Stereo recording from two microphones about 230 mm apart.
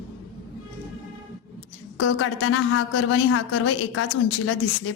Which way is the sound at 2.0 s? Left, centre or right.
Left.